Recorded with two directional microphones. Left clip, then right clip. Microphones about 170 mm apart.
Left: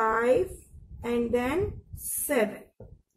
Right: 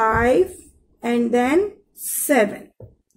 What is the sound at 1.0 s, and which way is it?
Speech, 30° right (ahead or behind).